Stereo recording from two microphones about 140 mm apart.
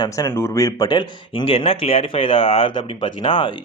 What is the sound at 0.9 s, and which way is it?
Speech, 35° left (ahead or behind).